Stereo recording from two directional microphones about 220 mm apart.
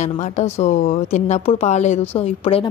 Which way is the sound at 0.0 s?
30° left (ahead or behind).